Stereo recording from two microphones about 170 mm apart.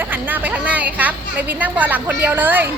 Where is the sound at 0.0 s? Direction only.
10° right (ahead or behind).